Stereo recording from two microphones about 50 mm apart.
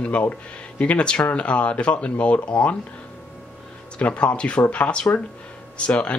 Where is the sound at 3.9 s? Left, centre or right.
Left.